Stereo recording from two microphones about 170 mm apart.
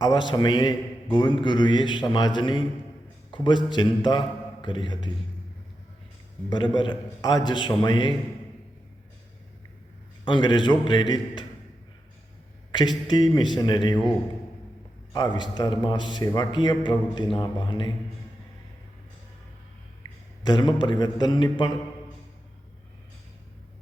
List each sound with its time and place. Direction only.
0.0 s a man's voice: 25° left (ahead or behind)
6.5 s a man's voice: 25° left (ahead or behind)
10.2 s a man's voice: 25° left (ahead or behind)
13.1 s a man's voice: 25° left (ahead or behind)
15.1 s a man's voice: 25° left (ahead or behind)
20.0 s speech: 25° left (ahead or behind)